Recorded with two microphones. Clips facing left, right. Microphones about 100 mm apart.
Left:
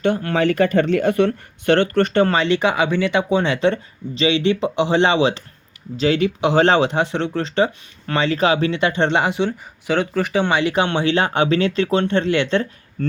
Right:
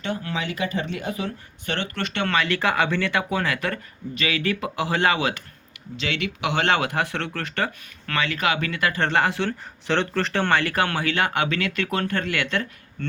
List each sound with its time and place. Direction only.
0.0 s speech: 55° left (ahead or behind); by 13.1 s 30° left (ahead or behind)